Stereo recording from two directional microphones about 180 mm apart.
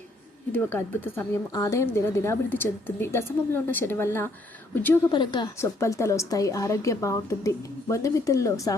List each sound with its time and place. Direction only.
0.5 s a woman's voice: 10° left (ahead or behind)
5.1 s a woman's voice: 25° left (ahead or behind)